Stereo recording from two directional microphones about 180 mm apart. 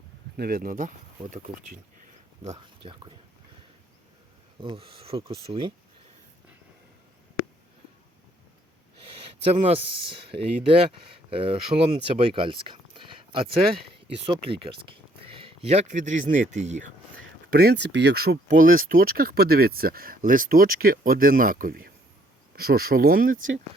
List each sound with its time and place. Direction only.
0.3 s speech: 60° right (ahead or behind)
2.4 s speech: 35° right (ahead or behind)
4.6 s speech: 30° right (ahead or behind)
9.0 s speech: 30° right (ahead or behind)
17.5 s speech: 60° right (ahead or behind)